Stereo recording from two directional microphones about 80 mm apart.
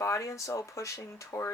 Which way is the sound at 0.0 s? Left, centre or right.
Left.